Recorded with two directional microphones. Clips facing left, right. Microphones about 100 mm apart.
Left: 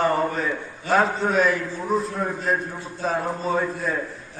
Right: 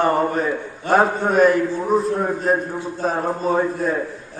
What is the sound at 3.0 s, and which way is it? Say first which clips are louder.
Speech: right 3 dB; 45° right (ahead or behind).